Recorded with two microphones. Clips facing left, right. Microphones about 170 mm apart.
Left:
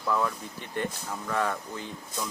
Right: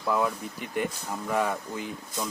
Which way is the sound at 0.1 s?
15° right (ahead or behind).